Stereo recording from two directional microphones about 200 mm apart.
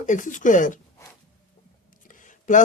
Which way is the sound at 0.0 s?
40° left (ahead or behind).